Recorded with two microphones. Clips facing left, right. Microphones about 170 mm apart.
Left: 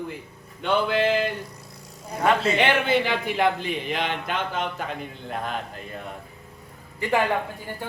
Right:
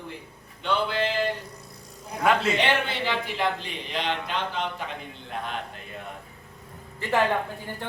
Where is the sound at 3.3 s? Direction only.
55° left (ahead or behind).